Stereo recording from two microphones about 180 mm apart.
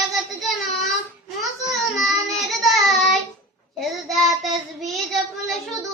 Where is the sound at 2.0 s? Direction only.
Centre (ahead or behind).